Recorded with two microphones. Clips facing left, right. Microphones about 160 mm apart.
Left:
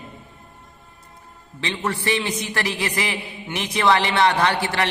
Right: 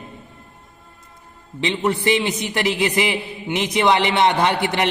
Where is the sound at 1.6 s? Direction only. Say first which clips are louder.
Right 5 dB; 20° right (ahead or behind).